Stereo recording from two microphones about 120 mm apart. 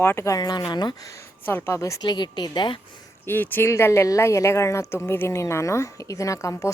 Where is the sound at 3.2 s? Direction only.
15° left (ahead or behind).